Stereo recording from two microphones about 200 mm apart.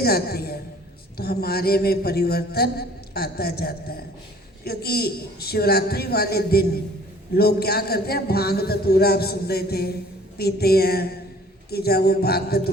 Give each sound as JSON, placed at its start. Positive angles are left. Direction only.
{"t": 0.0, "sound": "a man's voice", "side_deg": 50}